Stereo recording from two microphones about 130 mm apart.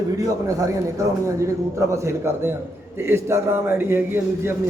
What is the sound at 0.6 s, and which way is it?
A man's voice, 25° right (ahead or behind).